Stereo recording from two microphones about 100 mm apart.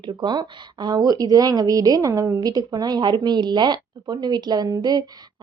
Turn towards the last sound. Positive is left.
turn(degrees=-40)  # may be behind; listen again after turning